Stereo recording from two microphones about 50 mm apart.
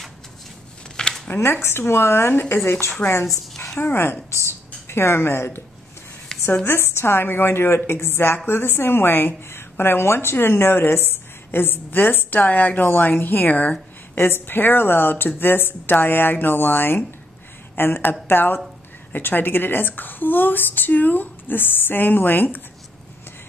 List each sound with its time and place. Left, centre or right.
1.0 s a sound: centre
1.3 s a woman's voice: left
6.6 s a woman's voice: left